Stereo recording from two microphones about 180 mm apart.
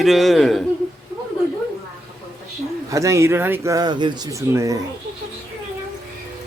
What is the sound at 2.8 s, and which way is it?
Speech, 15° right (ahead or behind).